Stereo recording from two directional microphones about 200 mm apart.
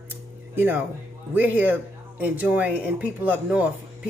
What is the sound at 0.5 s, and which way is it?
Speech, 10° right (ahead or behind).